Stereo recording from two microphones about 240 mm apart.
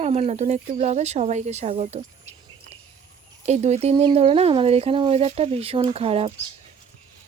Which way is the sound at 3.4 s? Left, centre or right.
Right.